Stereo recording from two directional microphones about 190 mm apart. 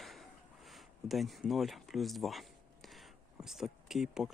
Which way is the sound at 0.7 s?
Centre (ahead or behind).